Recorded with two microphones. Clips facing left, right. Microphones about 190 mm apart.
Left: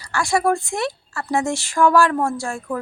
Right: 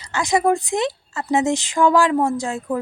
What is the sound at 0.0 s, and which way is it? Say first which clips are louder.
A woman's voice: right 1 dB; 20° right (ahead or behind).